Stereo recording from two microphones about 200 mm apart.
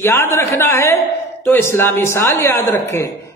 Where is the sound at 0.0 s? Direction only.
10° left (ahead or behind).